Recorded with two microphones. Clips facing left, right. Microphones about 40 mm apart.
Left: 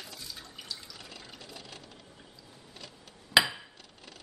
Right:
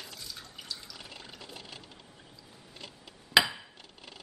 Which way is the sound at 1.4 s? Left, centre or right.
Right.